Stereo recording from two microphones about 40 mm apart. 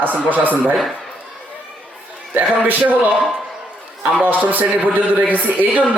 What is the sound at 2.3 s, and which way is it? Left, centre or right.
Speech, right.